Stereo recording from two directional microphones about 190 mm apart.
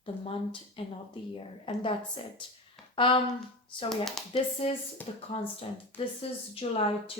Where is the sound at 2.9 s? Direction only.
25° left (ahead or behind).